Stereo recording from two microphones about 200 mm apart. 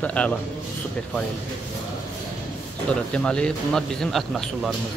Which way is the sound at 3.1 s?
5° left (ahead or behind).